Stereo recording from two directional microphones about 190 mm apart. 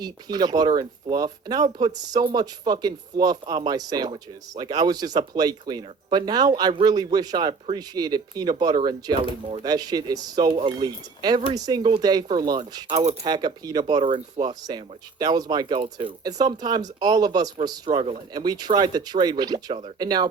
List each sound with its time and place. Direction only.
0.0 s speech: 20° right (ahead or behind)
12.9 s speech: 35° right (ahead or behind)
13.2 s speech: 20° right (ahead or behind)